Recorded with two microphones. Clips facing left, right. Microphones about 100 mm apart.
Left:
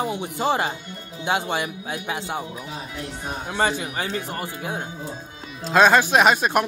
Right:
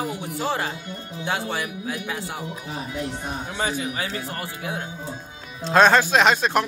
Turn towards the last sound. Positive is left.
turn(degrees=10)  # may be behind; listen again after turning